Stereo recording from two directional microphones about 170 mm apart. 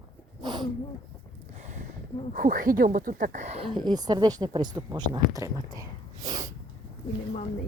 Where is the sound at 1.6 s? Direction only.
45° right (ahead or behind).